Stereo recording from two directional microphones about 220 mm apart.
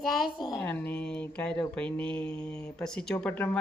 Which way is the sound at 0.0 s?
Centre (ahead or behind).